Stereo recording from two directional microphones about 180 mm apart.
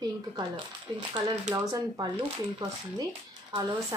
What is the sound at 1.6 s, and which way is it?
Speech, 20° right (ahead or behind).